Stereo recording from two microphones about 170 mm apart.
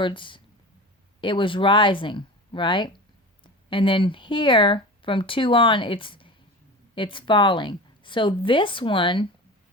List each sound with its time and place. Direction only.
0.0 s speech: 30° left (ahead or behind)